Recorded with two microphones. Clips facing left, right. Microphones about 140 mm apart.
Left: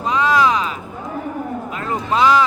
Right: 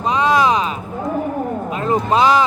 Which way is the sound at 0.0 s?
20° right (ahead or behind).